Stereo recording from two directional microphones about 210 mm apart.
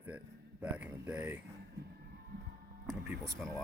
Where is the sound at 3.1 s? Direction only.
Centre (ahead or behind).